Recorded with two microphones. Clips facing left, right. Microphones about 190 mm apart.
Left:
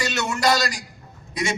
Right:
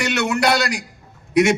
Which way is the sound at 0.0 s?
65° right (ahead or behind).